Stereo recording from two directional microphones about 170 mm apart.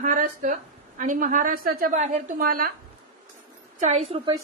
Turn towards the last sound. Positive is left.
turn(degrees=-35)  # may be behind; listen again after turning